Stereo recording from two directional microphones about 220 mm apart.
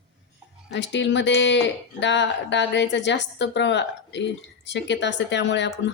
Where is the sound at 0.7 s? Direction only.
55° left (ahead or behind).